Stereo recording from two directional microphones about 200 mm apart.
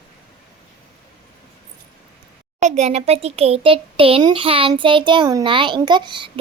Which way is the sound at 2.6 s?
35° right (ahead or behind).